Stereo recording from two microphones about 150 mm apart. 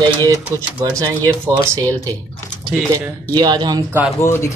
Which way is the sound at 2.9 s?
25° right (ahead or behind).